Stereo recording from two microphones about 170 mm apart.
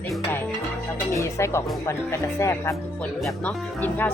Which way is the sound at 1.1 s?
15° left (ahead or behind).